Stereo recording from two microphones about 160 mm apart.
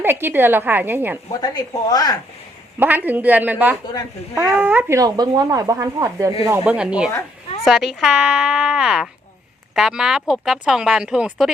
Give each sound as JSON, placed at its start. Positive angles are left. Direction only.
{"t": 0.0, "sound": "a woman's voice", "side_deg": -15}
{"t": 1.3, "sound": "speech", "side_deg": 25}
{"t": 2.7, "sound": "a woman's voice", "side_deg": -10}